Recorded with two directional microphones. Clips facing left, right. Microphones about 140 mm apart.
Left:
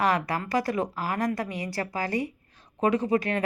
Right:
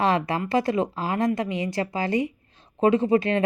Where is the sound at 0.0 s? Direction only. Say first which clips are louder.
Right 3 dB; 25° right (ahead or behind).